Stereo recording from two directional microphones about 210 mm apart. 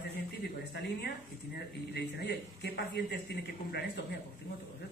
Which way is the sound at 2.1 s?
50° left (ahead or behind).